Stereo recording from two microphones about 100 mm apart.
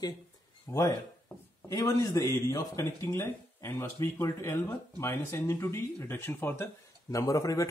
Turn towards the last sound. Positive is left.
turn(degrees=35)  # may be behind; listen again after turning